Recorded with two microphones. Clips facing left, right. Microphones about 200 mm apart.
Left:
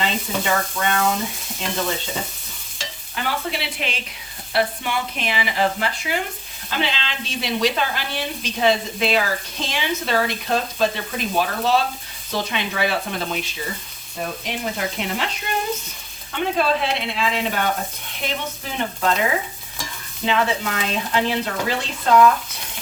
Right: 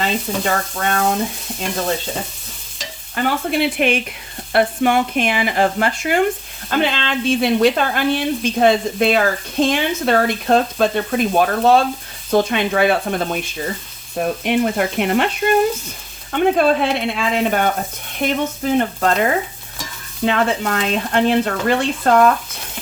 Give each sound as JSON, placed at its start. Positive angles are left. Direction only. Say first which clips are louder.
{"t": 0.0, "sound": "speech", "louder": "right 3 dB", "side_deg": -45}
{"t": 3.2, "sound": "speech", "louder": "right 8 dB", "side_deg": -50}
{"t": 14.4, "sound": "frying", "louder": "right 10 dB", "side_deg": -60}
{"t": 16.3, "sound": "speech", "louder": "right 6 dB", "side_deg": -50}